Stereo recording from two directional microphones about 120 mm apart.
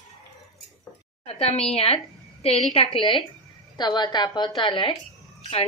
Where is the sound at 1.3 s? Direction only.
55° left (ahead or behind).